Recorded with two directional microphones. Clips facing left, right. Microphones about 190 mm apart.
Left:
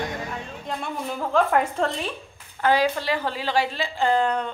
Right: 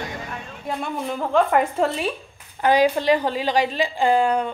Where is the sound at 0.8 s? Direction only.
Centre (ahead or behind).